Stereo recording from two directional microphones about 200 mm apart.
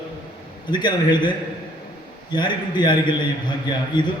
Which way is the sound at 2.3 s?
20° left (ahead or behind).